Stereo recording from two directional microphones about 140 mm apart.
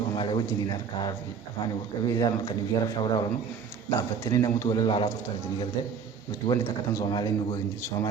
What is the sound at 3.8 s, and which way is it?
A man's voice, 25° left (ahead or behind).